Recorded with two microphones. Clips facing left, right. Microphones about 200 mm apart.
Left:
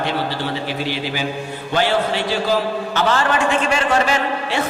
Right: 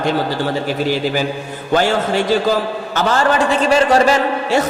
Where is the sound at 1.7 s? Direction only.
45° right (ahead or behind).